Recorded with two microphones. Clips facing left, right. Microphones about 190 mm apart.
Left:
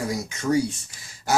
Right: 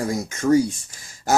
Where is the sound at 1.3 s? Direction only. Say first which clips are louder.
Right 3 dB; 45° right (ahead or behind).